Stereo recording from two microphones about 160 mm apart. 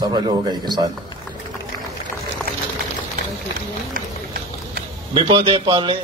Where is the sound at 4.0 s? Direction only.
60° right (ahead or behind).